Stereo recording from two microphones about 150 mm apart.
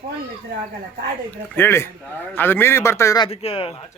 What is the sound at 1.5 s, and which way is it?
A man's voice, 15° left (ahead or behind).